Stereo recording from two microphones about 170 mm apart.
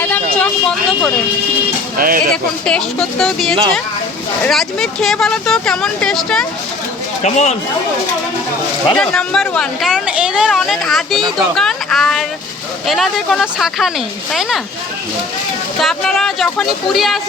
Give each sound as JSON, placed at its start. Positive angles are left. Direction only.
{"t": 0.0, "sound": "a sound", "side_deg": 10}
{"t": 2.0, "sound": "speech", "side_deg": -55}
{"t": 2.3, "sound": "speech", "side_deg": 5}
{"t": 7.2, "sound": "speech", "side_deg": 45}
{"t": 9.0, "sound": "speech", "side_deg": 5}
{"t": 15.8, "sound": "speech", "side_deg": 0}